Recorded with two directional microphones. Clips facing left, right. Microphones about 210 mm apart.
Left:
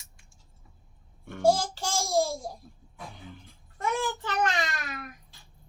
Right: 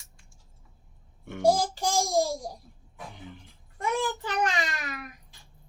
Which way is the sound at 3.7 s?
10° right (ahead or behind).